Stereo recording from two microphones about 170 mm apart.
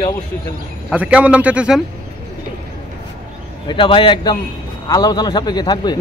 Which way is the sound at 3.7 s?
30° left (ahead or behind).